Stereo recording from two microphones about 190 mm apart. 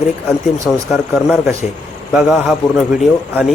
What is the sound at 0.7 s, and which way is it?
Speech, 5° right (ahead or behind).